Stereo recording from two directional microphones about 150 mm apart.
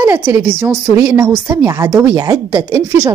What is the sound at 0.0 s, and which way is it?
A woman's voice, 15° right (ahead or behind).